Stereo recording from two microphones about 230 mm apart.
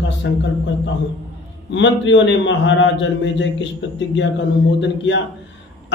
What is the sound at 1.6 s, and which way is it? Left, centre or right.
A man's voice, left.